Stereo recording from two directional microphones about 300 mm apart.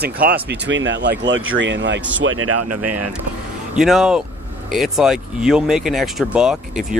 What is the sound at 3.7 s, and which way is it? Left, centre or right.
Speech, centre.